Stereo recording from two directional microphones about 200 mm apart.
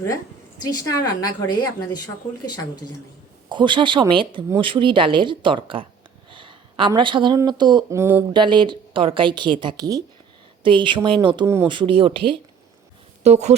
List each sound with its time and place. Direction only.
0.6 s speech: 20° left (ahead or behind)
3.5 s a woman's voice: 25° right (ahead or behind)
8.3 s a woman's voice: 25° right (ahead or behind)
11.4 s speech: 15° right (ahead or behind)
11.7 s a woman's voice: 25° right (ahead or behind)